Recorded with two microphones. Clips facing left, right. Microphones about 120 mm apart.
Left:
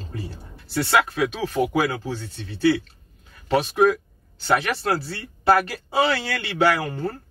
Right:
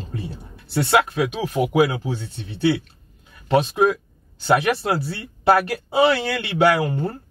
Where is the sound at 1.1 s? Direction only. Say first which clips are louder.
Right 1 dB; 20° right (ahead or behind).